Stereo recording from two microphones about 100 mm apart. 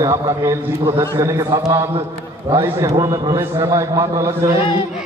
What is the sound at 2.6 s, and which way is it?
A man's voice, 30° right (ahead or behind).